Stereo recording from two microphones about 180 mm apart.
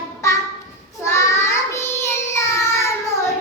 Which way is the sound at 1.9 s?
15° left (ahead or behind).